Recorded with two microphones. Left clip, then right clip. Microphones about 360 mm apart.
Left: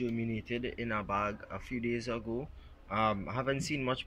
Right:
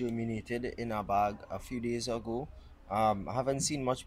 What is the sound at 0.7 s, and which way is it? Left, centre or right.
Speech, centre.